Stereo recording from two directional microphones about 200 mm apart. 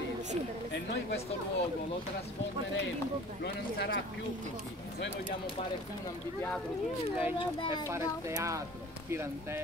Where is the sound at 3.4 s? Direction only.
50° left (ahead or behind).